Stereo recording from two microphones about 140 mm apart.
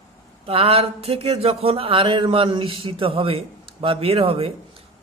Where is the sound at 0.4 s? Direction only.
45° right (ahead or behind).